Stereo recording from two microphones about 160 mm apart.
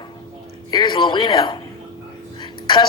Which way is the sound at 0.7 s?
30° left (ahead or behind).